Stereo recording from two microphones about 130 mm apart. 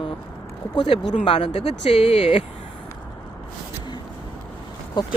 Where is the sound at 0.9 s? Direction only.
50° left (ahead or behind).